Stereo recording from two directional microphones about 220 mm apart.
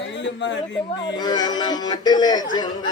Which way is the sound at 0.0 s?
55° left (ahead or behind).